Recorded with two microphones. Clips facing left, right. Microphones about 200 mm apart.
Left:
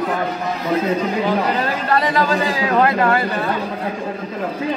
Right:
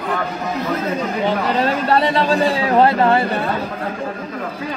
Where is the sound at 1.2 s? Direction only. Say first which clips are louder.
Right 1 dB; 25° right (ahead or behind).